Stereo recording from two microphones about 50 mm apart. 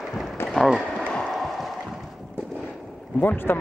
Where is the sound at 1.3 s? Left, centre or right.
Centre.